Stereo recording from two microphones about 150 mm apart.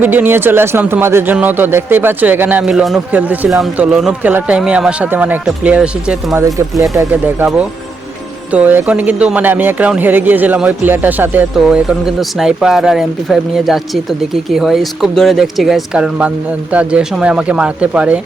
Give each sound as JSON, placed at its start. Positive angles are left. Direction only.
{"t": 0.0, "sound": "speech", "side_deg": -15}
{"t": 6.4, "sound": "speech", "side_deg": -20}